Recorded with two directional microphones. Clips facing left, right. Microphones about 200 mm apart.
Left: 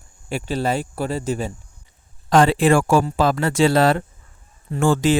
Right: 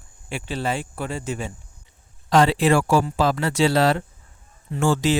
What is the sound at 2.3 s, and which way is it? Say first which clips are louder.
Speech: left 2 dB; 50° left (ahead or behind).